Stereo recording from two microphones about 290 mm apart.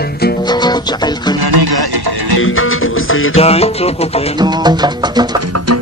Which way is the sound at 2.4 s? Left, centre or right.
Left.